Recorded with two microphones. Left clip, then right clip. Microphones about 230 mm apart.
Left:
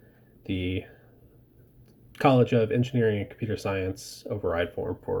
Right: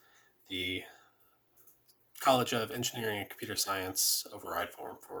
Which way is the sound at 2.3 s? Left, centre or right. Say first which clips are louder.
Left 5 dB; centre.